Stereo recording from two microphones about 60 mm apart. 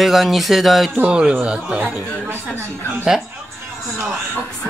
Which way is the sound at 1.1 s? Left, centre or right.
Centre.